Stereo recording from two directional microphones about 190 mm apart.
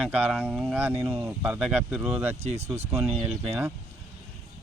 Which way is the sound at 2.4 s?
35° right (ahead or behind).